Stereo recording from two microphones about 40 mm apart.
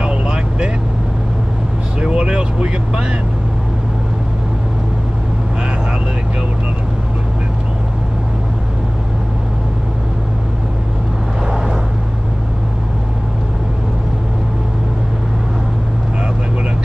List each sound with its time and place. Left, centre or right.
0.0 s vehicle: right
2.0 s vehicle: right
11.5 s vehicle: centre